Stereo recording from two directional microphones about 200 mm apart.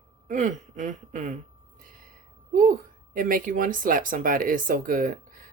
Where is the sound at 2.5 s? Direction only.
45° right (ahead or behind).